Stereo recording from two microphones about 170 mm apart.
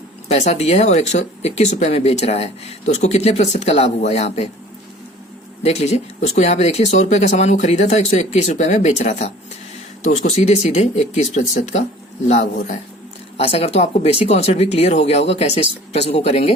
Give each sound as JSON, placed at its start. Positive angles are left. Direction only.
{"t": 0.3, "sound": "speech", "side_deg": 40}
{"t": 5.6, "sound": "speech", "side_deg": 40}
{"t": 13.3, "sound": "speech", "side_deg": 35}